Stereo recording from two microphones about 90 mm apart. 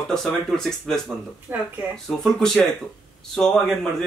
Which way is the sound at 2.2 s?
5° left (ahead or behind).